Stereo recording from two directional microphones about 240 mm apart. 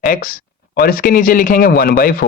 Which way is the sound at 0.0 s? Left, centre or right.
Left.